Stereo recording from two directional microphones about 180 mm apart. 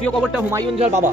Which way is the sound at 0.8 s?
40° right (ahead or behind).